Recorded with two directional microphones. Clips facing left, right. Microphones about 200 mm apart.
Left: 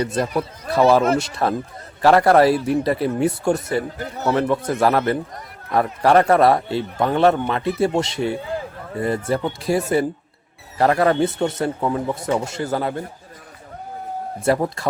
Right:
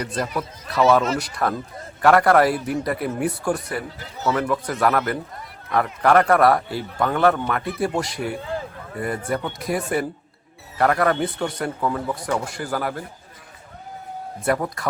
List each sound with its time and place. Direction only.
0.0 s speech: 30° left (ahead or behind)
3.9 s a man's voice: 55° left (ahead or behind)
4.4 s speech: 25° left (ahead or behind)
14.4 s speech: 25° left (ahead or behind)